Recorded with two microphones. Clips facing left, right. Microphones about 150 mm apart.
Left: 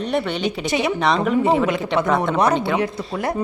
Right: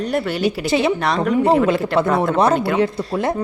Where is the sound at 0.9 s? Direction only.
Centre (ahead or behind).